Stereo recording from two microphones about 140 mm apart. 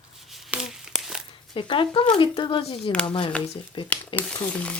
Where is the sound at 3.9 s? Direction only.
10° left (ahead or behind).